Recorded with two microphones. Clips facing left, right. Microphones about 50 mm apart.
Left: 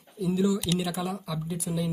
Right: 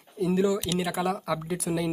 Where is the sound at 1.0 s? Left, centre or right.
Right.